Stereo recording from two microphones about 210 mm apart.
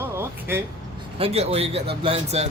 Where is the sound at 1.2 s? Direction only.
30° right (ahead or behind).